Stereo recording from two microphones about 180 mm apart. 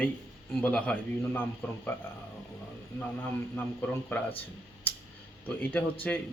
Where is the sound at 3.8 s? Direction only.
10° left (ahead or behind).